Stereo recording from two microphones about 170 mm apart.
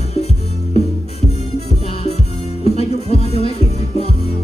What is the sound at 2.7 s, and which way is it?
Music, 40° left (ahead or behind).